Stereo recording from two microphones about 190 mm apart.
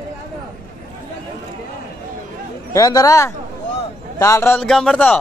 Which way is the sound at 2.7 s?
20° left (ahead or behind).